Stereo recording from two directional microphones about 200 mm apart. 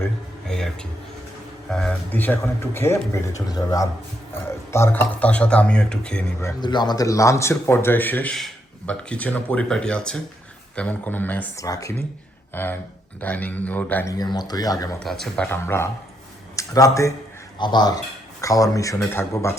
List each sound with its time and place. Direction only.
0.4 s a sound: 5° left (ahead or behind)
1.7 s speech: 5° left (ahead or behind)
6.6 s speech: 20° left (ahead or behind)
15.0 s speech: centre (ahead or behind)